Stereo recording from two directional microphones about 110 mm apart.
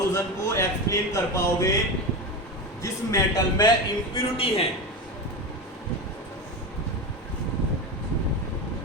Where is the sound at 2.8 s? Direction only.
30° left (ahead or behind).